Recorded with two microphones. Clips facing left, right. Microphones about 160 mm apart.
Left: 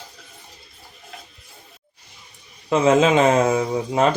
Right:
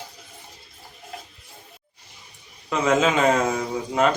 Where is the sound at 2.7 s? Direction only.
30° left (ahead or behind).